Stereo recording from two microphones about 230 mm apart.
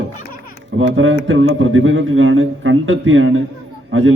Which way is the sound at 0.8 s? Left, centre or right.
Right.